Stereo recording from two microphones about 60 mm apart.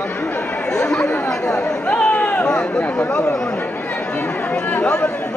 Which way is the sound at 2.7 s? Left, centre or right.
Left.